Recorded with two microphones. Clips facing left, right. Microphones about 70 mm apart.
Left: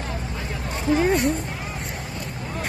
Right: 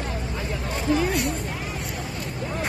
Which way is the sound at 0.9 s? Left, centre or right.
Left.